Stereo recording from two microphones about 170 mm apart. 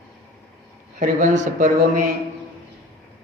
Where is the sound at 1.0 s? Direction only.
45° right (ahead or behind).